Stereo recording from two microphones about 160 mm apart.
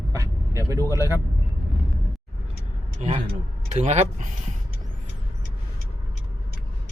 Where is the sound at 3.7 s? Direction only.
45° right (ahead or behind).